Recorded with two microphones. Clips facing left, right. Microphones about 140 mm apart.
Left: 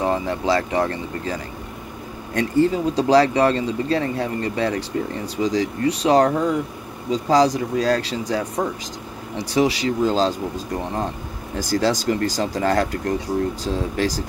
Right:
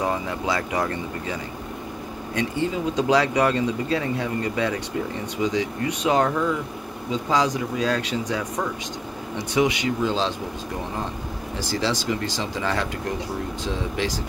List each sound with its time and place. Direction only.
0.0 s speech: 30° left (ahead or behind)
11.5 s speech: 45° left (ahead or behind)